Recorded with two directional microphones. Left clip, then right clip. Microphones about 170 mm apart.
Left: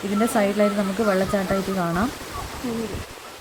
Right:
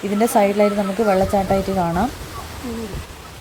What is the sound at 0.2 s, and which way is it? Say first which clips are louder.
Speech: right 5 dB; 20° right (ahead or behind).